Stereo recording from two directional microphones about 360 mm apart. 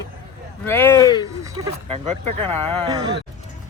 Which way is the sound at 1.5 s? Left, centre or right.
Centre.